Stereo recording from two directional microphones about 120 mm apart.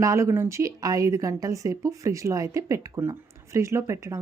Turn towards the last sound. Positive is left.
turn(degrees=-25)  # may be behind; listen again after turning